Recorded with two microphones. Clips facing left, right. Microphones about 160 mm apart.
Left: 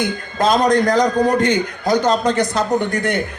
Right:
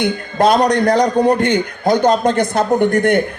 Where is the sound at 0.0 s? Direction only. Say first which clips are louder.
Right 4 dB; 60° right (ahead or behind).